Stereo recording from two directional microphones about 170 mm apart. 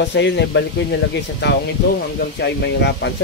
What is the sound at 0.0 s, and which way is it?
Speech, 90° left.